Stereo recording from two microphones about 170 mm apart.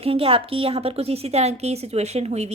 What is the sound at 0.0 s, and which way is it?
A woman's voice, 35° right (ahead or behind).